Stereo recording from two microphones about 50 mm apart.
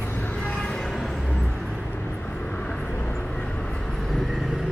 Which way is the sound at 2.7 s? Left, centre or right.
Centre.